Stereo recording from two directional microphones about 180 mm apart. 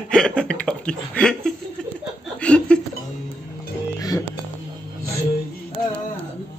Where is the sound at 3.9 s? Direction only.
20° left (ahead or behind).